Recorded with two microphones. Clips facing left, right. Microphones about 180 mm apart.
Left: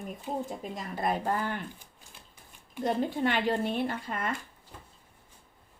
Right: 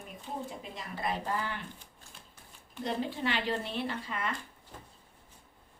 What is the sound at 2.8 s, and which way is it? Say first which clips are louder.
Speech: left 5 dB; 50° left (ahead or behind).